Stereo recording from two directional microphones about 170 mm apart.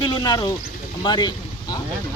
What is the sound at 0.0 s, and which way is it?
Speech, 25° left (ahead or behind).